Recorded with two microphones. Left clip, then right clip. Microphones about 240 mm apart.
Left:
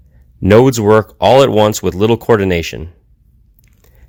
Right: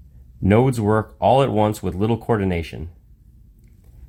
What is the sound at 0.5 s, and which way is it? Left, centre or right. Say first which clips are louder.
Speech: left 10 dB; left.